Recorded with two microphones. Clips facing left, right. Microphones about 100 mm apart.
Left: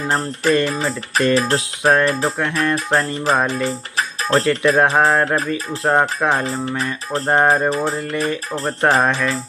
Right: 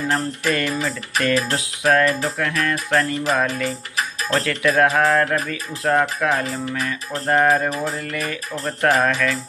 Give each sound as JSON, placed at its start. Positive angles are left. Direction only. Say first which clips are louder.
{"t": 0.1, "sound": "music", "louder": "left 7 dB", "side_deg": 30}